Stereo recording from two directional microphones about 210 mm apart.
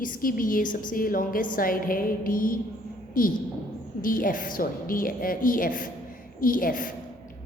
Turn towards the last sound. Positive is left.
turn(degrees=40)  # may be behind; listen again after turning